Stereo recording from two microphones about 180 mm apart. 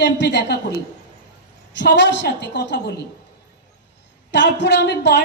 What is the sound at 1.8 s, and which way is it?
A woman's voice, 75° left (ahead or behind).